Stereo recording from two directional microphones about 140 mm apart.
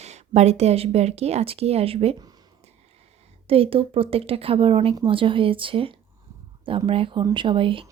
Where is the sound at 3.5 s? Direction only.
40° right (ahead or behind).